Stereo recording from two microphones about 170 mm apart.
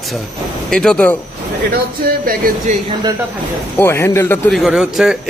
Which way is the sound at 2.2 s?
55° right (ahead or behind).